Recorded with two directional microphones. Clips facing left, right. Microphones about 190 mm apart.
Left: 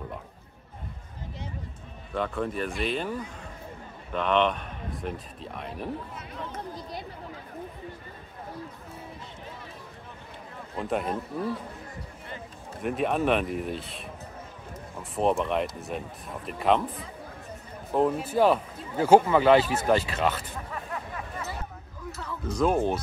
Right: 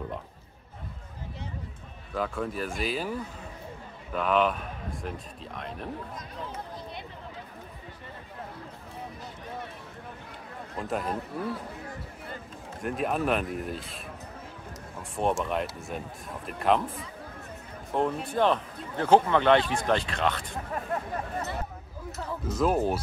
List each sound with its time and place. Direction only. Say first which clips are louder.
2.1 s speech: left 2 dB; centre (ahead or behind)
10.8 s speech: left 2 dB; centre (ahead or behind)
12.8 s speech: left 3 dB; centre (ahead or behind)
15.1 s speech: left 3 dB; centre (ahead or behind)
20.9 s a sound: right 7 dB; 45° right (ahead or behind)
22.5 s speech: left 1 dB; 5° right (ahead or behind)